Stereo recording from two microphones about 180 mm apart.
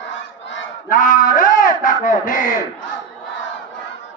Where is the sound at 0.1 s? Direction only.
90° left.